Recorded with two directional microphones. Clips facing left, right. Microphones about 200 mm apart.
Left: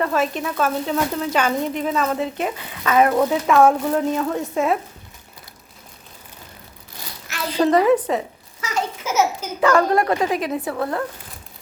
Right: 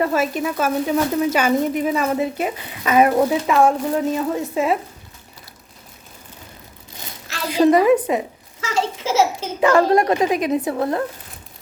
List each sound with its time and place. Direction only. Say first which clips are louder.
0.0 s speech: right 2 dB; 5° right (ahead or behind)
7.5 s speech: right 2 dB; 10° right (ahead or behind)
8.6 s a child's voice: right 3 dB; 30° right (ahead or behind)